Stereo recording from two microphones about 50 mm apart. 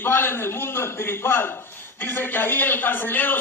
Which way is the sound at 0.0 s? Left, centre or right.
Left.